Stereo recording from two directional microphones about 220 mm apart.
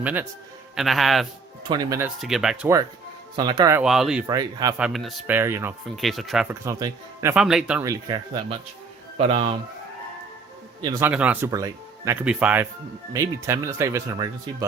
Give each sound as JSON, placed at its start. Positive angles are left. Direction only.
{"t": 0.0, "sound": "speech", "side_deg": -5}
{"t": 1.6, "sound": "speech", "side_deg": -20}
{"t": 2.2, "sound": "speech", "side_deg": 0}
{"t": 3.3, "sound": "speech", "side_deg": -20}
{"t": 3.8, "sound": "speech", "side_deg": 0}
{"t": 4.3, "sound": "speech", "side_deg": -15}
{"t": 4.8, "sound": "speech", "side_deg": 0}
{"t": 6.0, "sound": "speech", "side_deg": 0}
{"t": 6.7, "sound": "a man's voice", "side_deg": -15}
{"t": 10.8, "sound": "speech", "side_deg": -10}